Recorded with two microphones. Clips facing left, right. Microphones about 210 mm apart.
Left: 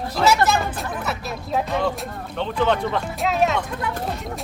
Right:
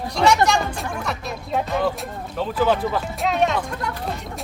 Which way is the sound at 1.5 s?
Centre (ahead or behind).